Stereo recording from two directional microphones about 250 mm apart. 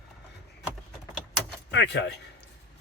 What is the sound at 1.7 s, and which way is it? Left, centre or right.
Speech, left.